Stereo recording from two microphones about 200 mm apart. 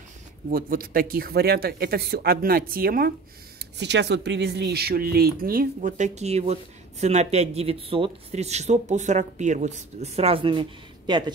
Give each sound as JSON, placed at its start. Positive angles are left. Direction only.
{"t": 0.5, "sound": "speech", "side_deg": -45}
{"t": 3.7, "sound": "speech", "side_deg": -60}